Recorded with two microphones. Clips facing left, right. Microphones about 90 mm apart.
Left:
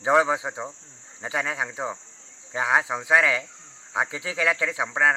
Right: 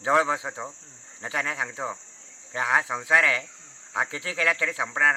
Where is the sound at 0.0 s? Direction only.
15° left (ahead or behind).